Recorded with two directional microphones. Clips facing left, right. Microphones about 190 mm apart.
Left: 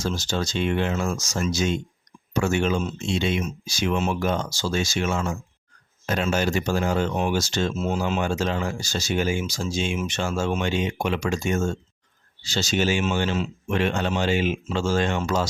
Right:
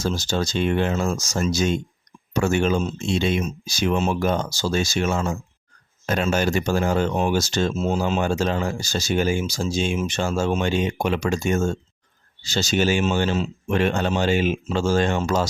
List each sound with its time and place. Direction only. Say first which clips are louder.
0.0 s speech: right 3 dB; 35° right (ahead or behind)
6.1 s speech: right 2 dB; 45° right (ahead or behind)